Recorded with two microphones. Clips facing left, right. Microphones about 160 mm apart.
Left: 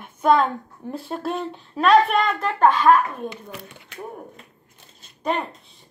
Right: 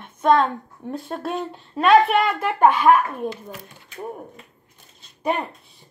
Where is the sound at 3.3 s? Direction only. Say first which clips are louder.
Right 2 dB; 65° left (ahead or behind).